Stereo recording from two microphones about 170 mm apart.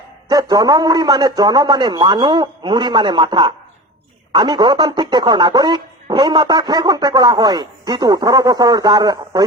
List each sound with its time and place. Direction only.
0.3 s speech: 20° right (ahead or behind)